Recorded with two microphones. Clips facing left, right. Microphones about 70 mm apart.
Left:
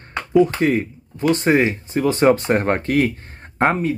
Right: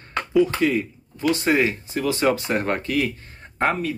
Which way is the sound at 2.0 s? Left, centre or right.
Left.